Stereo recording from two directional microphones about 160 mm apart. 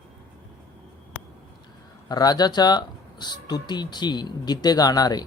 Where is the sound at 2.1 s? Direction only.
25° left (ahead or behind).